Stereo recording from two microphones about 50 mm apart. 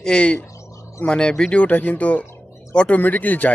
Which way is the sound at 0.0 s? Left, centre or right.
Centre.